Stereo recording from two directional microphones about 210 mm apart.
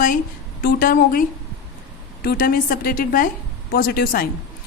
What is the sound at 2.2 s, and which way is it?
A woman's voice, 45° left (ahead or behind).